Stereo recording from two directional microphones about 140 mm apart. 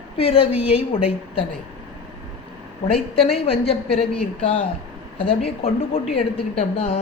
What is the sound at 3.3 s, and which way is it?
Speech, 45° left (ahead or behind).